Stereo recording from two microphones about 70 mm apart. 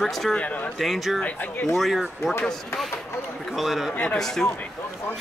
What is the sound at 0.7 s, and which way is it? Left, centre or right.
Speech, centre.